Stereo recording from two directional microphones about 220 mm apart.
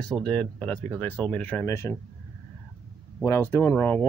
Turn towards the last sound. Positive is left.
turn(degrees=5)  # may be behind; listen again after turning